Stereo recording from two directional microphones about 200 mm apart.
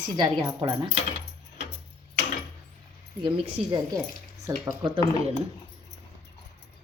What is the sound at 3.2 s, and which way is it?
Speech, 25° right (ahead or behind).